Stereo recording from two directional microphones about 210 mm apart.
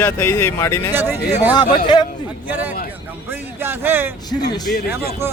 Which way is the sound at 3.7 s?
10° right (ahead or behind).